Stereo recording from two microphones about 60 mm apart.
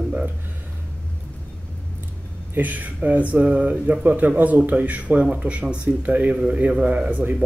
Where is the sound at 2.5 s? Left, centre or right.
Right.